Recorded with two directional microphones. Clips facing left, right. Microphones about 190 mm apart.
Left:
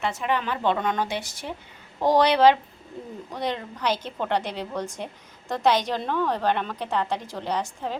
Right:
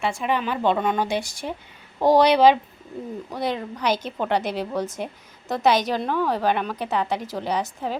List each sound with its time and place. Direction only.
0.0 s a woman's voice: 10° right (ahead or behind)